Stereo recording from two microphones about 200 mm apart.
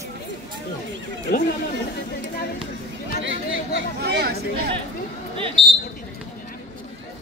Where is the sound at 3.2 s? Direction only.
70° right (ahead or behind); by 4.4 s 55° right (ahead or behind).